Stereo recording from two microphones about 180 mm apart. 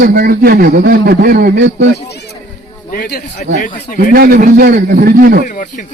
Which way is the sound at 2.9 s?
55° left (ahead or behind).